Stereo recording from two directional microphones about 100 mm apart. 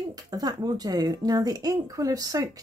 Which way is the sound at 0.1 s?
40° right (ahead or behind).